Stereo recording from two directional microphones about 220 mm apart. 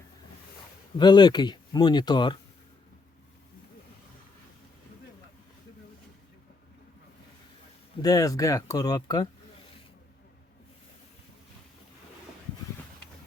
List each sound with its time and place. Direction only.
0.9 s speech: 20° left (ahead or behind)
8.0 s speech: 15° left (ahead or behind)